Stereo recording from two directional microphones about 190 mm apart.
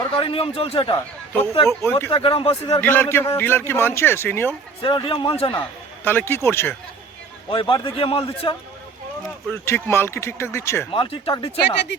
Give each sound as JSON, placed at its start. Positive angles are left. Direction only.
{"t": 0.2, "sound": "a man's voice", "side_deg": 30}
{"t": 0.9, "sound": "speech", "side_deg": 10}
{"t": 2.0, "sound": "a man's voice", "side_deg": 30}
{"t": 2.8, "sound": "speech", "side_deg": 10}
{"t": 4.8, "sound": "a man's voice", "side_deg": 25}
{"t": 6.1, "sound": "speech", "side_deg": 10}
{"t": 7.5, "sound": "a man's voice", "side_deg": 25}
{"t": 9.2, "sound": "speech", "side_deg": 10}
{"t": 10.9, "sound": "a man's voice", "side_deg": 25}
{"t": 11.6, "sound": "speech", "side_deg": 60}